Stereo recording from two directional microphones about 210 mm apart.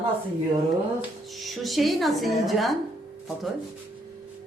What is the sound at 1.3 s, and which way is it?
A woman's voice, centre (ahead or behind).